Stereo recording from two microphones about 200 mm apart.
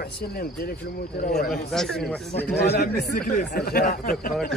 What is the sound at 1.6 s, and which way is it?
Speech, centre (ahead or behind).